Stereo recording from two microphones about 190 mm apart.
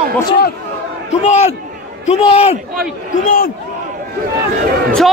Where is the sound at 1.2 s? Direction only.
35° left (ahead or behind).